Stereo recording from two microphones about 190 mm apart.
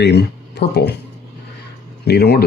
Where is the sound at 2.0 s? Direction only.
60° left (ahead or behind).